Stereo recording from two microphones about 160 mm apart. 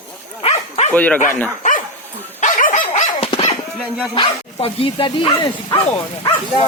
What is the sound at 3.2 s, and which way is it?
Dog, 40° left (ahead or behind).